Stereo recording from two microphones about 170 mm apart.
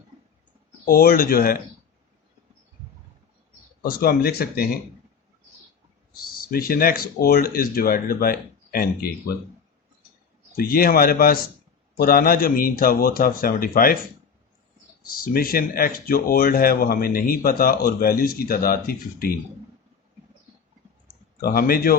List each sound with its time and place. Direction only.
0.9 s speech: 60° left (ahead or behind)
3.8 s speech: 65° left (ahead or behind)
6.3 s speech: 60° left (ahead or behind)
10.6 s speech: 60° left (ahead or behind)
15.2 s speech: 60° left (ahead or behind)
21.4 s speech: 60° left (ahead or behind)